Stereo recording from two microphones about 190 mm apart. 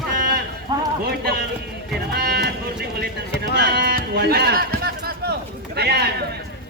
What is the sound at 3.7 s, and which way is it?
Music, 55° right (ahead or behind).